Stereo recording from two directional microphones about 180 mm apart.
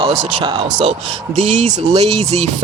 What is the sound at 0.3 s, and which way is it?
Speech, 30° right (ahead or behind).